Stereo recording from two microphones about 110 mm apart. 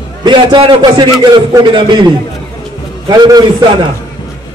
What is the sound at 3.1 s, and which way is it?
Speech, 40° right (ahead or behind).